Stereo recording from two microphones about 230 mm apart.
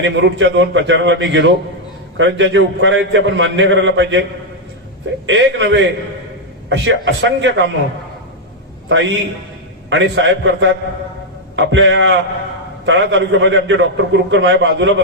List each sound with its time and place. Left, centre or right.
0.0 s a man's voice: right
5.2 s a man's voice: right
8.9 s a man's voice: right